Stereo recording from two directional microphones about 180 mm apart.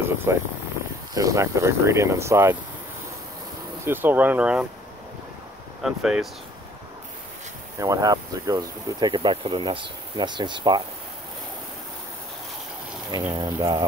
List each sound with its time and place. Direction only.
0.0 s speech: 15° right (ahead or behind)
3.8 s speech: 10° right (ahead or behind)
5.8 s speech: 5° right (ahead or behind)
7.8 s speech: 20° right (ahead or behind)
13.3 s speech: 25° right (ahead or behind)